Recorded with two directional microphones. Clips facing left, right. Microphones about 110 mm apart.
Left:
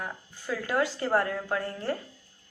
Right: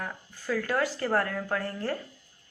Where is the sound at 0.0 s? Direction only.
20° left (ahead or behind).